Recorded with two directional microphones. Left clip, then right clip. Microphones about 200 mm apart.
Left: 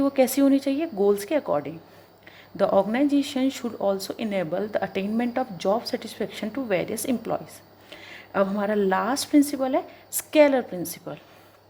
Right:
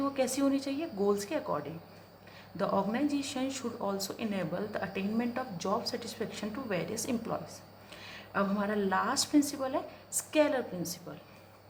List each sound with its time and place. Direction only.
0.0 s speech: 35° left (ahead or behind)